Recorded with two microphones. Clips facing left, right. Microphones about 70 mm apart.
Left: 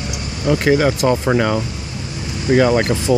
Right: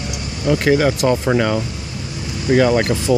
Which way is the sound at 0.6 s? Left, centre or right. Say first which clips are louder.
Even; centre.